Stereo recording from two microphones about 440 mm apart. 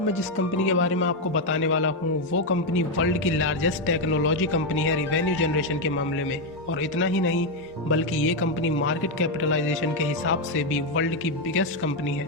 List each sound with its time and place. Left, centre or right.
0.7 s speech: left
6.9 s speech: left